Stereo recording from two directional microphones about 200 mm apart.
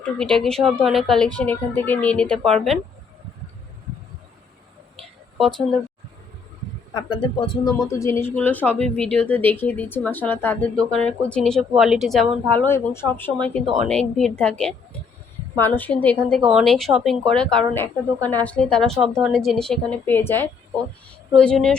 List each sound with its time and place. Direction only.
0.2 s a woman's voice: 5° left (ahead or behind)
6.9 s a woman's voice: 25° left (ahead or behind); by 21.8 s 5° left (ahead or behind)